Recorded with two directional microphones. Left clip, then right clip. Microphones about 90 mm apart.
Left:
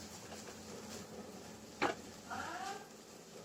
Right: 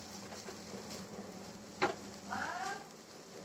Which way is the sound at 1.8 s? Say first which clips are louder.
Right 2 dB; 35° left (ahead or behind).